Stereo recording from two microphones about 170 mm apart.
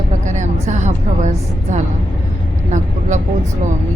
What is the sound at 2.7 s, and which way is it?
Speech, 45° right (ahead or behind).